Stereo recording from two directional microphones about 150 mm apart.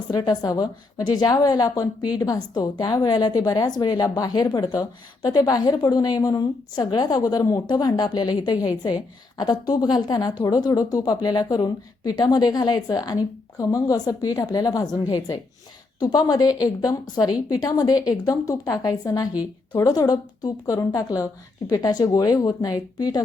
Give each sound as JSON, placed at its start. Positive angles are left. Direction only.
{"t": 0.1, "sound": "a woman's voice", "side_deg": 25}